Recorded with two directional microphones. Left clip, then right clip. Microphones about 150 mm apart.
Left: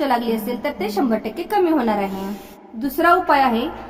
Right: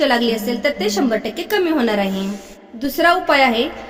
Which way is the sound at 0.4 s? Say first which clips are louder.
Right 5 dB; 20° right (ahead or behind).